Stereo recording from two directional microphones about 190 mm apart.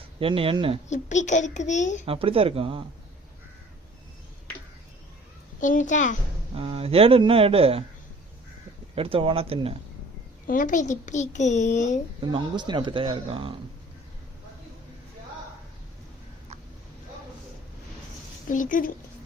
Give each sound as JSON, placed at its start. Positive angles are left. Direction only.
{"t": 0.0, "sound": "speech", "side_deg": -30}
{"t": 0.9, "sound": "a child's voice", "side_deg": 40}
{"t": 2.0, "sound": "speech", "side_deg": -30}
{"t": 5.5, "sound": "a child's voice", "side_deg": 40}
{"t": 6.5, "sound": "speech", "side_deg": -30}
{"t": 9.0, "sound": "speech", "side_deg": -30}
{"t": 10.4, "sound": "a child's voice", "side_deg": 45}
{"t": 12.2, "sound": "speech", "side_deg": -25}
{"t": 18.4, "sound": "speech", "side_deg": 45}